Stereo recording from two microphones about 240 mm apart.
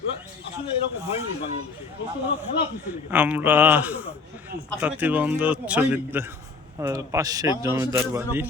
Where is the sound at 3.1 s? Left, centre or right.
Centre.